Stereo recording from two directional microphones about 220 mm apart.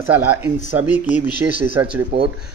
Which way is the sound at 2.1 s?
50° right (ahead or behind).